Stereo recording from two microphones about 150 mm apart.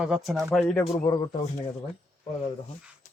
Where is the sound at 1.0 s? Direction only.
30° left (ahead or behind).